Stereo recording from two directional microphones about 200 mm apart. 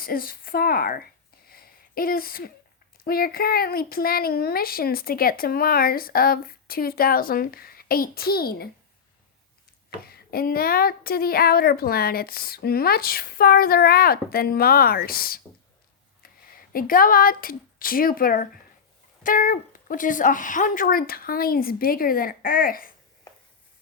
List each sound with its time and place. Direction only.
0.0 s speech: 45° left (ahead or behind)
1.5 s a sound: 50° left (ahead or behind)
3.0 s speech: 50° left (ahead or behind)
10.0 s speech: 50° left (ahead or behind)